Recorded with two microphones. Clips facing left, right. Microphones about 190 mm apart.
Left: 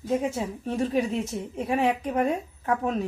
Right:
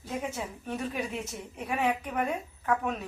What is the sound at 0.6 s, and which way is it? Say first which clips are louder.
Speech: left 9 dB; 30° left (ahead or behind).